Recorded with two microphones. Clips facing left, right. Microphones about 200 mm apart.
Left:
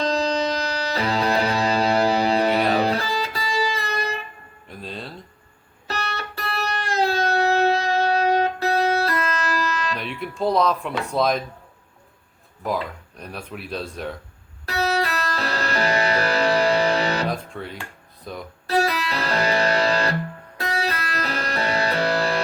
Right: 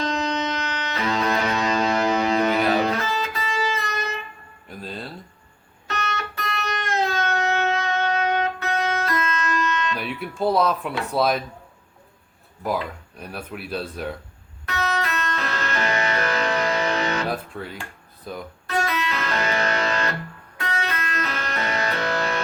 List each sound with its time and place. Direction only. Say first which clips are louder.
0.0 s music: left 3 dB; 35° left (ahead or behind)
4.7 s music: even; centre (ahead or behind)
5.9 s music: even; 35° left (ahead or behind)
10.0 s speech: even; 5° right (ahead or behind)
12.6 s speech: even; 5° right (ahead or behind)
14.7 s music: left 3 dB; 35° left (ahead or behind)
17.3 s speech: even; 5° right (ahead or behind)
18.7 s music: left 3 dB; 35° left (ahead or behind)